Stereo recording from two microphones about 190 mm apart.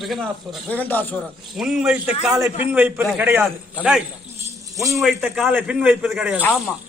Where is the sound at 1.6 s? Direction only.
5° right (ahead or behind).